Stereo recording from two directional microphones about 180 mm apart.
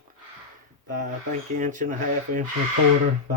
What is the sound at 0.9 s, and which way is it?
Speech, 45° right (ahead or behind).